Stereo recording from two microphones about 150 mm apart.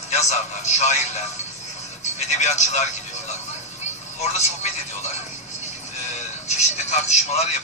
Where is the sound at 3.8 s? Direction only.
50° left (ahead or behind).